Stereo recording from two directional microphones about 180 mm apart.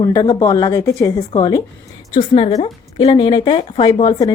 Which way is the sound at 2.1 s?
35° left (ahead or behind).